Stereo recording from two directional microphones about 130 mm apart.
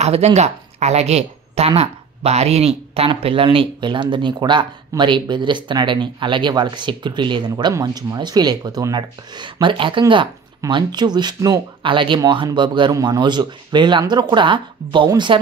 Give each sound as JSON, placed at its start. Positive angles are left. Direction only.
{"t": 0.0, "sound": "a woman's voice", "side_deg": -55}